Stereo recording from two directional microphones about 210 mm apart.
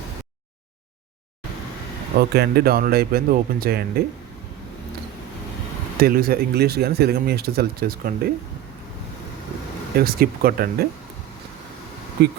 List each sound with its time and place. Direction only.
2.3 s speech: 50° right (ahead or behind)
6.0 s speech: 45° right (ahead or behind)
10.0 s speech: 45° right (ahead or behind)
12.2 s speech: 50° right (ahead or behind)